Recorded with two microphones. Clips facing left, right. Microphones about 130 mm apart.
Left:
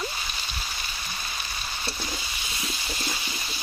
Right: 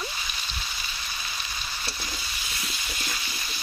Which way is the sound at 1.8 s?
25° left (ahead or behind).